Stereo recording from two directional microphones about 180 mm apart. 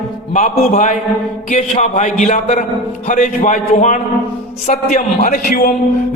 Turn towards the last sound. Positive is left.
turn(degrees=50)  # may be behind; listen again after turning